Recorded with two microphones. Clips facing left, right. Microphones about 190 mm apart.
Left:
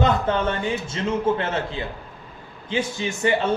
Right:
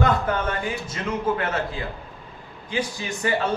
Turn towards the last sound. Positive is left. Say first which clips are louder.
# left 3 dB
turn(degrees=25)  # may be behind; listen again after turning